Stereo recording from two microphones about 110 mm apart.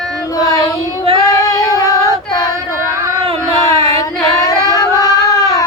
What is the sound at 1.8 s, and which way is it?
Child singing, 30° left (ahead or behind).